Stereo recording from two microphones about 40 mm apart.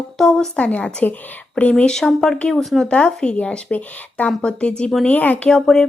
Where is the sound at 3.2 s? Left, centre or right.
Left.